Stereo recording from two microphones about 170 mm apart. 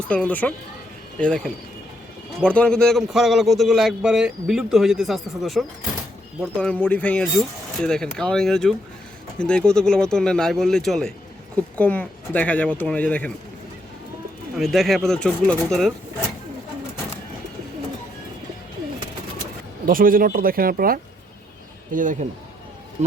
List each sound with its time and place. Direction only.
0.1 s a man's voice: 10° left (ahead or behind)
14.5 s a man's voice: centre (ahead or behind)
19.8 s speech: 55° right (ahead or behind)